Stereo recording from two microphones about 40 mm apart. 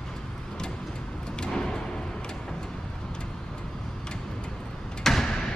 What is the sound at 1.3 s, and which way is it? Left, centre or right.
Vehicle, centre.